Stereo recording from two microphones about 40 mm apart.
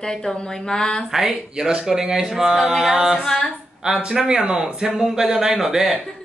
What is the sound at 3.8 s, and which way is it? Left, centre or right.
Speech, right.